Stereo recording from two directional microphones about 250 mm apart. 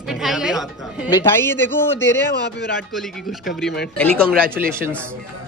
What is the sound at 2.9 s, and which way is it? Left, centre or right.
Speech, centre.